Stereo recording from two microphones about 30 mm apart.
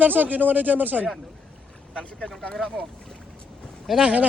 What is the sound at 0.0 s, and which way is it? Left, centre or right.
Speech, right.